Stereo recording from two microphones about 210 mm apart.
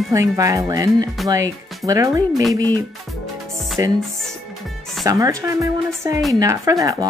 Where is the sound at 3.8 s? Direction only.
15° right (ahead or behind).